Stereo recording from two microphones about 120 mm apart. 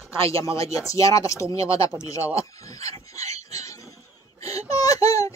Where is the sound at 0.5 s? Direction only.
25° left (ahead or behind).